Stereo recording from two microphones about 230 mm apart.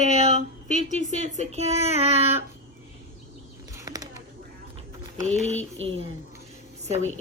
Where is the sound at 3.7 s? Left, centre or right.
Centre.